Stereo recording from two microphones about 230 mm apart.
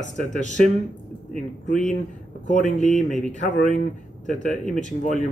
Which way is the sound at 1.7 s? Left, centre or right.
Left.